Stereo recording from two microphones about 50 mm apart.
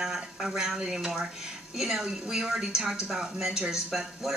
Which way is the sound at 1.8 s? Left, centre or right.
Centre.